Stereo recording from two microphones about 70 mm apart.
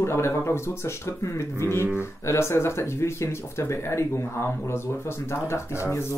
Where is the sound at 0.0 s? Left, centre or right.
Left.